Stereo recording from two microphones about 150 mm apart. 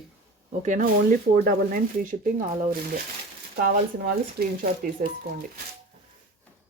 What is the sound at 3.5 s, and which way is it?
Speech, 90° right.